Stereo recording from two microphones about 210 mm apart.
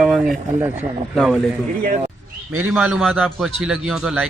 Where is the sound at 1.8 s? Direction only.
40° right (ahead or behind).